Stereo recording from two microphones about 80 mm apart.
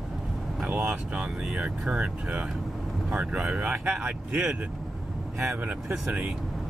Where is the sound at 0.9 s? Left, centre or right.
Centre.